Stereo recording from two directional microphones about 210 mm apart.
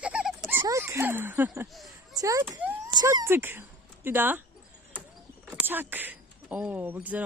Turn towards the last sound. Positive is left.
turn(degrees=-5)  # may be behind; listen again after turning